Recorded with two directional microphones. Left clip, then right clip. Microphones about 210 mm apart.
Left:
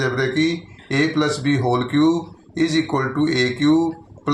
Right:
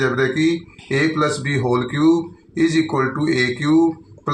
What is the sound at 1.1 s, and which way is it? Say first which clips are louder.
Speech: even; 40° left (ahead or behind).